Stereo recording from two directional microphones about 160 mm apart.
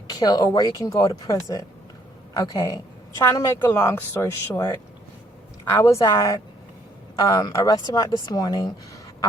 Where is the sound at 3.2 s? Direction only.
15° left (ahead or behind).